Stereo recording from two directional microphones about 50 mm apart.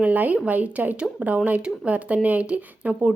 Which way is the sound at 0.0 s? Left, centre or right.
Right.